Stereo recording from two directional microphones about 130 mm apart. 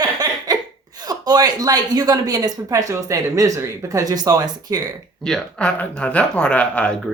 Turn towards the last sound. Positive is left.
turn(degrees=10)  # may be behind; listen again after turning